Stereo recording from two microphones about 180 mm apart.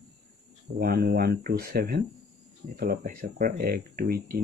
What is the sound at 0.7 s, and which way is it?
Speech, 55° right (ahead or behind).